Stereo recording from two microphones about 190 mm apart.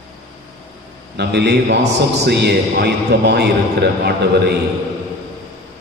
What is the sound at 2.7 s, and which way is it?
A man's voice, 60° right (ahead or behind).